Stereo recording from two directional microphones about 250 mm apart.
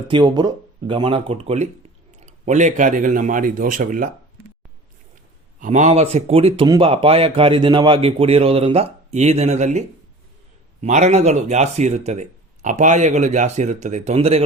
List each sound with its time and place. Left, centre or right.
0.1 s speech: centre; by 4.1 s right
5.5 s speech: right